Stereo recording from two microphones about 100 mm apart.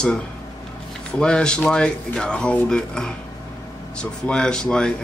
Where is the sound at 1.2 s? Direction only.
10° left (ahead or behind).